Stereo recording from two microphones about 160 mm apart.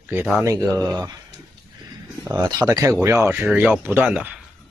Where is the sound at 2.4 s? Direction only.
25° right (ahead or behind).